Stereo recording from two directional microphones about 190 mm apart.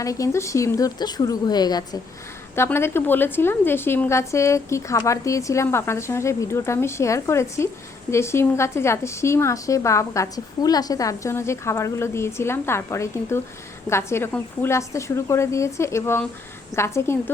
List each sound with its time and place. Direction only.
0.0 s a woman's voice: 15° left (ahead or behind)